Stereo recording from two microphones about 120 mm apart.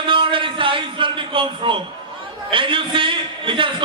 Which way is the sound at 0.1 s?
45° right (ahead or behind).